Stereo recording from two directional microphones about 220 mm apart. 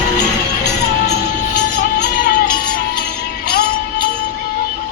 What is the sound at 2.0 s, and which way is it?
Music, 45° left (ahead or behind).